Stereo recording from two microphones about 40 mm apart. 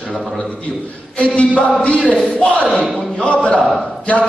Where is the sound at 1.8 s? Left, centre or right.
Left.